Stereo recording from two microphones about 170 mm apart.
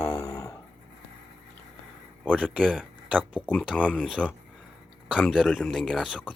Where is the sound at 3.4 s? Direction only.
5° left (ahead or behind).